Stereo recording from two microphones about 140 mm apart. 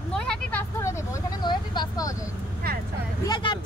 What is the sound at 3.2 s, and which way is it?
Speech, 30° left (ahead or behind).